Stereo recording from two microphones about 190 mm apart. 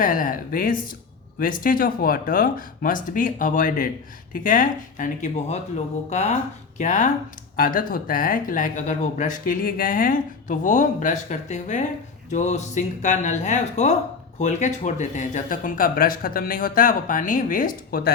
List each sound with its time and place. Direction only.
0.0 s speech: 45° left (ahead or behind)